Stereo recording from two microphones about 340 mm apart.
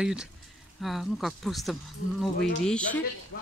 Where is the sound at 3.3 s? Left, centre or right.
Left.